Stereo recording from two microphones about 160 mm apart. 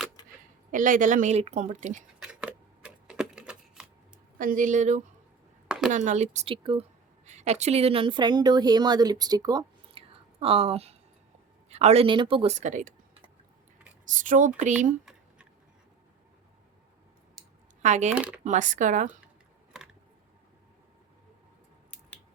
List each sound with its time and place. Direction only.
0.7 s a woman's voice: 55° right (ahead or behind)
2.1 s typewriter: 5° right (ahead or behind)
4.4 s a woman's voice: 55° right (ahead or behind)
5.6 s a sound: 5° right (ahead or behind)
5.9 s a woman's voice: 50° right (ahead or behind); by 6.8 s 30° right (ahead or behind)
7.3 s speech: 45° right (ahead or behind)
12.5 s a woman's voice: 50° right (ahead or behind)
14.2 s a woman's voice: 55° right (ahead or behind)
17.8 s a woman's voice: 50° right (ahead or behind)
18.1 s speech: 10° right (ahead or behind)
18.4 s a woman's voice: 50° right (ahead or behind)